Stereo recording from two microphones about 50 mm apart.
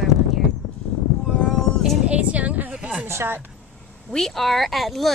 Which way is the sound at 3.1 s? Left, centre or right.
Right.